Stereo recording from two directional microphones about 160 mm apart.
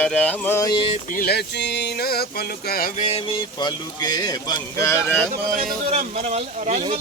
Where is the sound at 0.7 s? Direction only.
35° left (ahead or behind).